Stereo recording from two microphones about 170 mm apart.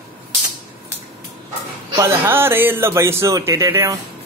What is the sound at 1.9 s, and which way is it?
A man's voice, 15° right (ahead or behind).